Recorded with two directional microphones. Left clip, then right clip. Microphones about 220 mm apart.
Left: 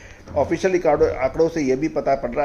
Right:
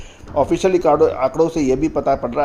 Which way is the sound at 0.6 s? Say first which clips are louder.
Right 3 dB; 40° right (ahead or behind).